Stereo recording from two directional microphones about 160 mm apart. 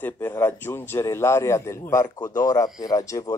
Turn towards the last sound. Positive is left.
turn(degrees=20)  # may be behind; listen again after turning